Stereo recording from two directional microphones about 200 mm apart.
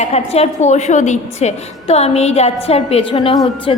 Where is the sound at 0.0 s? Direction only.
30° left (ahead or behind).